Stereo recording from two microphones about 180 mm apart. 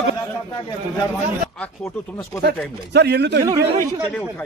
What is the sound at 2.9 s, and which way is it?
Speech, 65° right (ahead or behind).